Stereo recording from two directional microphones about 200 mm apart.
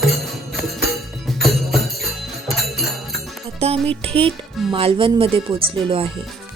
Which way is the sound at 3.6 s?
30° right (ahead or behind).